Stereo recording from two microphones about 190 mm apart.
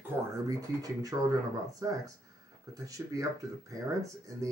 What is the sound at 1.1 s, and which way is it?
Speech, 15° right (ahead or behind).